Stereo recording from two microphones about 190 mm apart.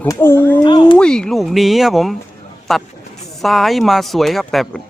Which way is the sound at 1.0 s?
5° left (ahead or behind).